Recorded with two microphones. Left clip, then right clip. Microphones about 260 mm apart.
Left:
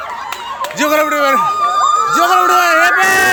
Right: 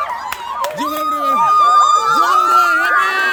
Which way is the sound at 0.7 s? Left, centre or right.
Centre.